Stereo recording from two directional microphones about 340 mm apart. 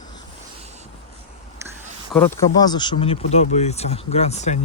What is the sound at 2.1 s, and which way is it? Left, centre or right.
Speech, centre.